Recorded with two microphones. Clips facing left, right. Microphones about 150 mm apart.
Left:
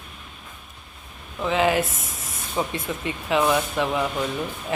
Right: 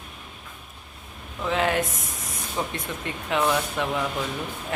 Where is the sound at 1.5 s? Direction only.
5° left (ahead or behind).